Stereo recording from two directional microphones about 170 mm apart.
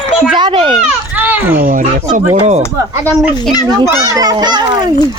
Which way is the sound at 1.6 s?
50° right (ahead or behind).